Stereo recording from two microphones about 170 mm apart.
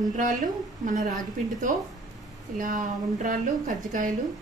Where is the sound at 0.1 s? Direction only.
50° right (ahead or behind).